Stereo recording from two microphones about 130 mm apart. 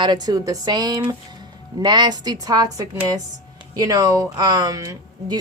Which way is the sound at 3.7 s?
30° right (ahead or behind).